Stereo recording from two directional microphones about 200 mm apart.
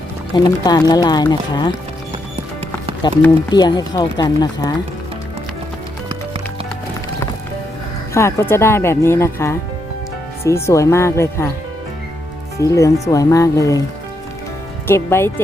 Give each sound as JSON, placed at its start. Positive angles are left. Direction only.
{"t": 0.3, "sound": "speech", "side_deg": 20}
{"t": 3.0, "sound": "speech", "side_deg": 20}
{"t": 8.1, "sound": "speech", "side_deg": 15}
{"t": 12.5, "sound": "speech", "side_deg": 15}
{"t": 14.8, "sound": "speech", "side_deg": 10}